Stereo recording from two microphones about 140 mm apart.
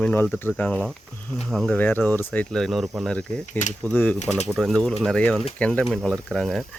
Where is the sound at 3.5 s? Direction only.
60° left (ahead or behind).